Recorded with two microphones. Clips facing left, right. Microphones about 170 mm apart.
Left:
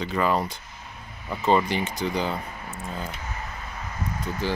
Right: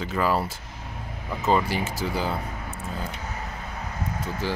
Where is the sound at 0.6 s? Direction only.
75° right (ahead or behind).